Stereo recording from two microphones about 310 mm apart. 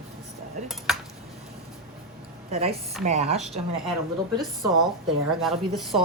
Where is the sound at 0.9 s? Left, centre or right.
Centre.